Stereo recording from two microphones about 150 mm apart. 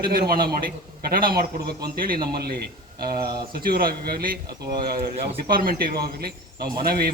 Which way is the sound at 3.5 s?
80° right.